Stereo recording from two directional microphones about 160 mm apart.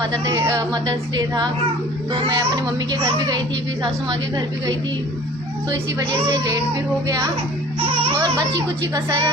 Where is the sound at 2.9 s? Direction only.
25° right (ahead or behind).